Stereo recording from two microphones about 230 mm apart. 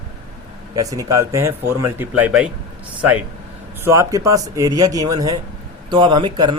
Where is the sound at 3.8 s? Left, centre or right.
Centre.